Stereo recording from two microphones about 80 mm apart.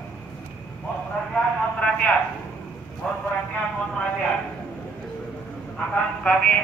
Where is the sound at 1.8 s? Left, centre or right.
Centre.